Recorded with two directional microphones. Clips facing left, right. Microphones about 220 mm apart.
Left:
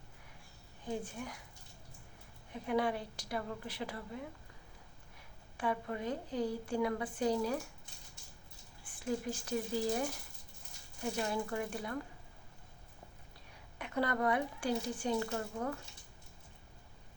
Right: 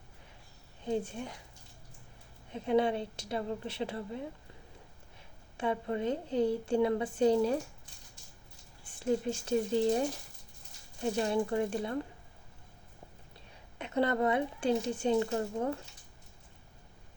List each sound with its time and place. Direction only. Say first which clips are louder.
0.9 s a woman's voice: right 6 dB; 25° right (ahead or behind)
2.5 s a woman's voice: right 5 dB; 25° right (ahead or behind)
5.5 s a woman's voice: right 4 dB; 25° right (ahead or behind)
9.0 s a woman's voice: right 6 dB; 25° right (ahead or behind)
13.7 s a woman's voice: right 5 dB; 25° right (ahead or behind)